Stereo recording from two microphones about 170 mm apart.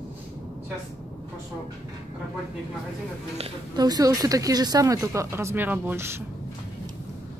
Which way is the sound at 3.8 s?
20° right (ahead or behind).